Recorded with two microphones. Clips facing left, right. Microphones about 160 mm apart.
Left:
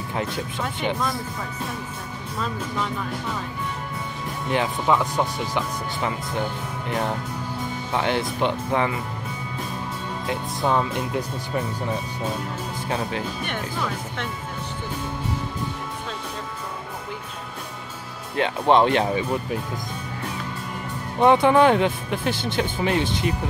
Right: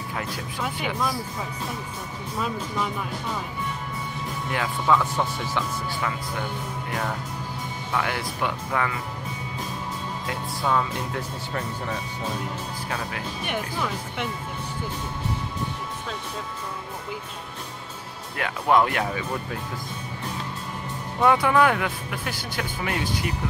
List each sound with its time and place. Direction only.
4.5 s speech: 20° left (ahead or behind)
6.9 s speech: 25° left (ahead or behind)
10.2 s speech: 25° left (ahead or behind)
12.8 s speech: 25° left (ahead or behind)
18.3 s speech: 25° left (ahead or behind)
21.2 s speech: 25° left (ahead or behind)